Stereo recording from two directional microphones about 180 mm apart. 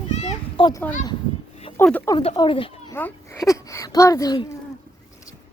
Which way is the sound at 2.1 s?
30° left (ahead or behind).